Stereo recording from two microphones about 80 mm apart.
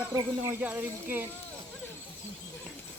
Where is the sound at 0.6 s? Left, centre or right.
Right.